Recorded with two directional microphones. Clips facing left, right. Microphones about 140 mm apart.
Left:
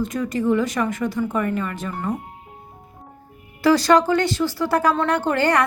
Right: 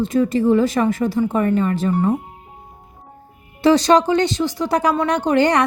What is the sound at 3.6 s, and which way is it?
Speech, 20° right (ahead or behind).